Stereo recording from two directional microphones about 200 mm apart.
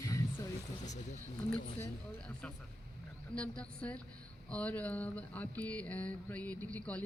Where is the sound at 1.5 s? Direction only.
10° left (ahead or behind).